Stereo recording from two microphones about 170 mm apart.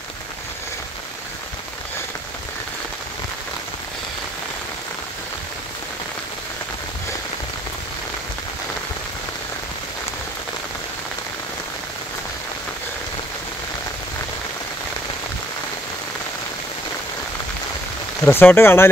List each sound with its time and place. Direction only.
18.2 s speech: 10° left (ahead or behind)